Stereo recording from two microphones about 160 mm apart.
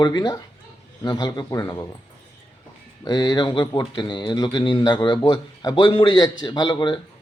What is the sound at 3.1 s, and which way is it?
Speech, 25° left (ahead or behind).